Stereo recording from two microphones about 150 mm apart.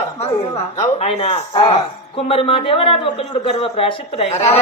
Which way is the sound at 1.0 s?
45° left (ahead or behind).